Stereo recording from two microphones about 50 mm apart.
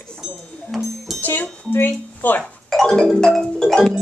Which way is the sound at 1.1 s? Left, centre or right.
Left.